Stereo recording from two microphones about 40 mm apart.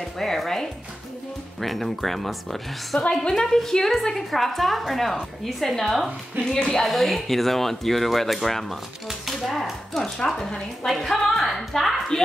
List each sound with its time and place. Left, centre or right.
0.2 s a woman's voice: centre
3.0 s a woman's voice: centre
6.5 s speech: centre
6.8 s a woman's voice: centre
9.2 s a sound: centre
9.9 s a woman's voice: centre
12.1 s speech: centre